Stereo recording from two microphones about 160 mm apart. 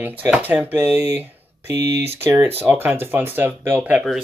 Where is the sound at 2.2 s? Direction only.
15° right (ahead or behind).